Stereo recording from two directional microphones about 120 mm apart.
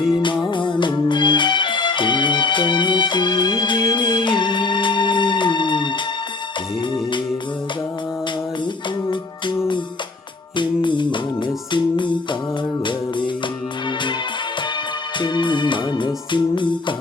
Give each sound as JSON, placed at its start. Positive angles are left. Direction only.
{"t": 0.1, "sound": "music", "side_deg": 40}
{"t": 10.6, "sound": "music", "side_deg": 40}
{"t": 15.2, "sound": "music", "side_deg": 40}